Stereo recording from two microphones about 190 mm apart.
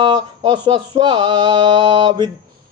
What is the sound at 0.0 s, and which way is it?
Speech, 25° right (ahead or behind).